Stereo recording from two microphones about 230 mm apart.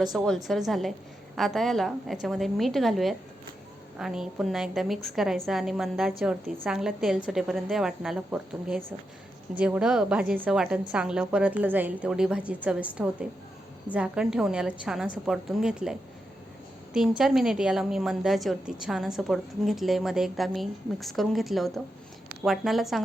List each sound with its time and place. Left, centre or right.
0.0 s a woman's voice: centre